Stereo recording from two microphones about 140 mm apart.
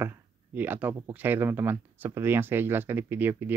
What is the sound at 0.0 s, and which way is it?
Speech, 15° right (ahead or behind).